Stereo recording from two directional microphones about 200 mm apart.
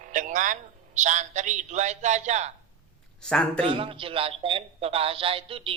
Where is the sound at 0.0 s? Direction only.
40° right (ahead or behind).